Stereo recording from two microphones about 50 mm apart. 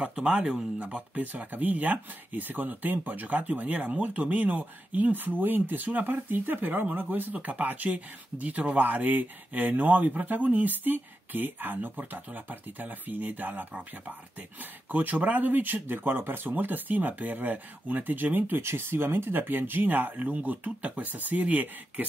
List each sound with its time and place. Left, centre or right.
0.1 s speech: right
14.9 s speech: right
18.6 s speech: right